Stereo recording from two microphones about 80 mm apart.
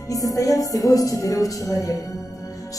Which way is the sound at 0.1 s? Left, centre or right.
Left.